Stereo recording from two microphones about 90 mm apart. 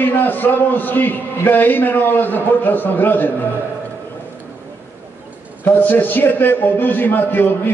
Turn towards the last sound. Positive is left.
turn(degrees=20)  # may be behind; listen again after turning